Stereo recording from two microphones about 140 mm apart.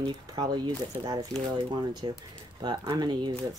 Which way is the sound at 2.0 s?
35° right (ahead or behind).